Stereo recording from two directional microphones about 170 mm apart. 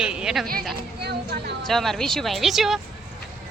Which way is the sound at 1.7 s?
Centre (ahead or behind).